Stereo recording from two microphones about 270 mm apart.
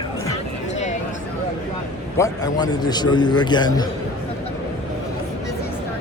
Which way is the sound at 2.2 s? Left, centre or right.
Centre.